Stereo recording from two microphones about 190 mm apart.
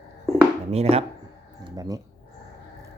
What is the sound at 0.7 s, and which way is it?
Speech, 30° right (ahead or behind).